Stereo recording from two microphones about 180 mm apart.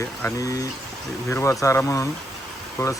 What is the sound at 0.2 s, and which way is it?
Speech, 15° left (ahead or behind).